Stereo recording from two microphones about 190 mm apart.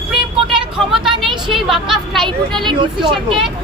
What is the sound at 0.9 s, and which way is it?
Speech, centre (ahead or behind).